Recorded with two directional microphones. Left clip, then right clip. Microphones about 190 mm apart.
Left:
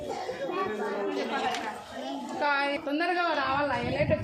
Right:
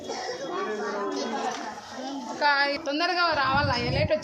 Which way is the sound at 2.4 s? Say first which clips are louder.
Right 4 dB; 70° left (ahead or behind).